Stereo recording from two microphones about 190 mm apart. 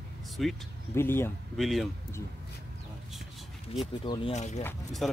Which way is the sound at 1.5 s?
Centre (ahead or behind).